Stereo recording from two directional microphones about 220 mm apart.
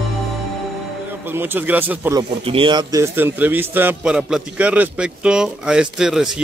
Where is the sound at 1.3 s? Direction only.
10° right (ahead or behind).